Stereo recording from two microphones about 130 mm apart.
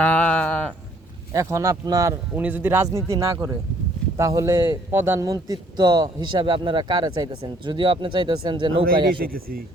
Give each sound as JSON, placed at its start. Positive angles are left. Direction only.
{"t": 0.0, "sound": "livestock", "side_deg": 10}
{"t": 1.3, "sound": "a man's voice", "side_deg": -25}